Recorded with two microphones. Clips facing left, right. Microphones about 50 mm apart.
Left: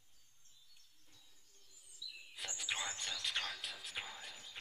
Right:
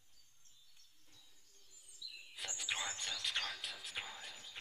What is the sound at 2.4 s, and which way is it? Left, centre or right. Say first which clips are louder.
Speech: even; centre.